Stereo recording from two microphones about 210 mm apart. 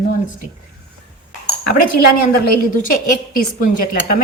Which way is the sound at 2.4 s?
45° left (ahead or behind).